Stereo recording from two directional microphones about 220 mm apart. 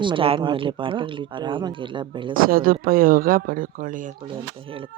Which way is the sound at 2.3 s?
40° right (ahead or behind).